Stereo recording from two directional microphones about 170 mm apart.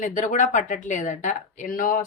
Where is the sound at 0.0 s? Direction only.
50° left (ahead or behind).